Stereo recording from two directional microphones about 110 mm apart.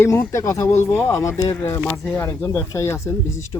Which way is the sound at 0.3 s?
30° left (ahead or behind).